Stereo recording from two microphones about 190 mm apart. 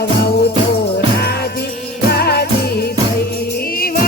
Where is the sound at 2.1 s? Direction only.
55° left (ahead or behind).